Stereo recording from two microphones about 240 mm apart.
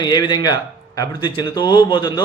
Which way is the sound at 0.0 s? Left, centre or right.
Centre.